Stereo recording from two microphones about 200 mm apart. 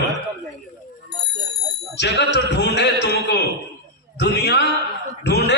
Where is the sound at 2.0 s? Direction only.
60° left (ahead or behind).